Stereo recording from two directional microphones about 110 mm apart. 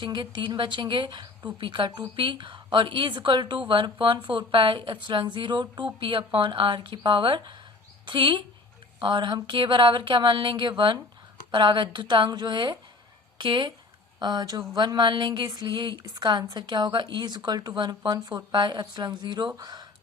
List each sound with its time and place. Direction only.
0.0 s a woman's voice: 45° right (ahead or behind)